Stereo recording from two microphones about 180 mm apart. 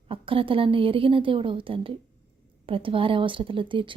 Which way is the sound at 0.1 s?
30° right (ahead or behind).